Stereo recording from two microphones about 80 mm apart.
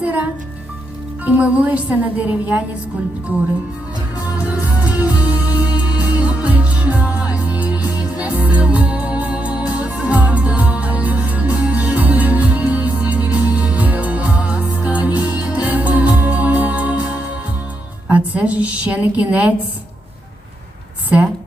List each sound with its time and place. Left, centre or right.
0.0 s a child's voice: centre
4.3 s music: centre
18.1 s speech: centre